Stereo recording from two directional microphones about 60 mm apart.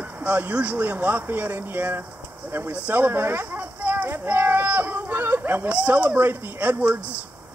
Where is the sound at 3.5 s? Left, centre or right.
Right.